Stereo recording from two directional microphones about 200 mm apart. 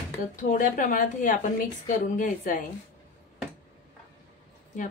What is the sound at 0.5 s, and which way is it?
A woman's voice, 40° left (ahead or behind).